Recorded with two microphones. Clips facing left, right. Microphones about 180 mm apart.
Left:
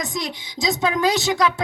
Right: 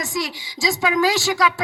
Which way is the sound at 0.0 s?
20° left (ahead or behind).